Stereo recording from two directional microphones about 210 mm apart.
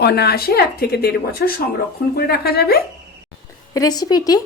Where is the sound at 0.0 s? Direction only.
50° left (ahead or behind).